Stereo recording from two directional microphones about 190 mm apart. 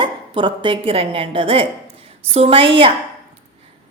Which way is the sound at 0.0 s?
25° right (ahead or behind).